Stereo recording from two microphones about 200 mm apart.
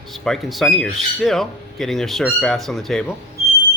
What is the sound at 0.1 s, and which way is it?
Speech, centre (ahead or behind).